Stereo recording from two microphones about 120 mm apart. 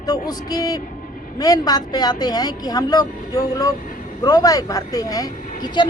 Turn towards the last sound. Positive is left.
turn(degrees=35)  # may be behind; listen again after turning